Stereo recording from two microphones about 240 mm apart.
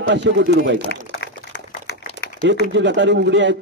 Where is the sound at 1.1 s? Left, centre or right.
Left.